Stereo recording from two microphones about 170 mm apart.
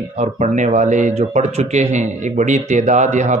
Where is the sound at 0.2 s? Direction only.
45° right (ahead or behind).